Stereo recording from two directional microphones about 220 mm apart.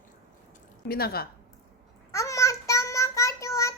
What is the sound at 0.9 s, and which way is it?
Speech, 45° left (ahead or behind).